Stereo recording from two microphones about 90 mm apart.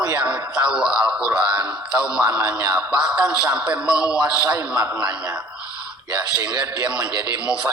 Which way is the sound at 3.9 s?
40° left (ahead or behind).